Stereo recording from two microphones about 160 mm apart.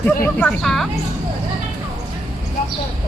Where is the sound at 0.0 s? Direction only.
10° left (ahead or behind).